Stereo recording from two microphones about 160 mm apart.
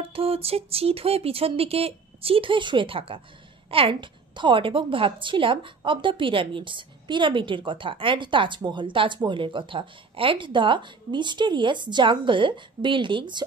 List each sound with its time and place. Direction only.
0.0 s a woman's voice: 35° right (ahead or behind)